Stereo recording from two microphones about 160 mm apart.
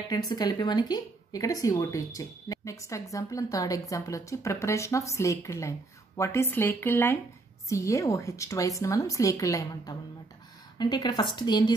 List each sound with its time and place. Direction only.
0.1 s speech: 25° left (ahead or behind)